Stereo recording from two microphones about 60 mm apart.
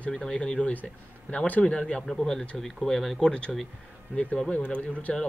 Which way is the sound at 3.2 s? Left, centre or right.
Centre.